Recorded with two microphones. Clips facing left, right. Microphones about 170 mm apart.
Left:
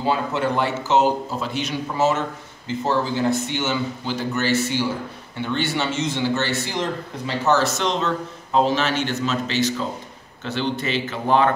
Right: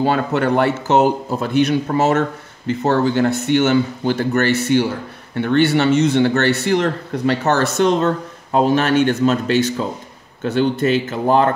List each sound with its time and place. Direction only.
0.0 s speech: 65° right (ahead or behind); by 11.5 s 40° right (ahead or behind)